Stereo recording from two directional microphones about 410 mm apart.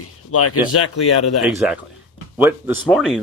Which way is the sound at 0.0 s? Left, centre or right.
Left.